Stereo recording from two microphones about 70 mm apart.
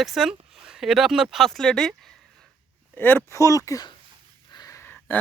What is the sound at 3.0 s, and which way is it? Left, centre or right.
Speech, left.